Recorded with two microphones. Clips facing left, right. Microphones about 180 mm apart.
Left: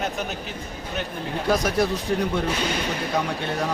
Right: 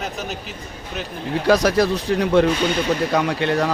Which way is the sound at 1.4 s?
85° right.